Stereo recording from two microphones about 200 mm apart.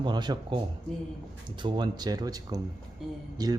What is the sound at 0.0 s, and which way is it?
Speech, 20° right (ahead or behind).